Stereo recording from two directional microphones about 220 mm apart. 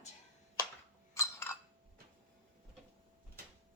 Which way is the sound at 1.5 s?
10° left (ahead or behind).